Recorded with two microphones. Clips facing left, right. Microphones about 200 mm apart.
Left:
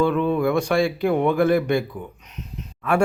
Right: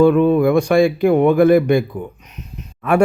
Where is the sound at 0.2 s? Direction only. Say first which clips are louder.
Right 8 dB; 50° right (ahead or behind).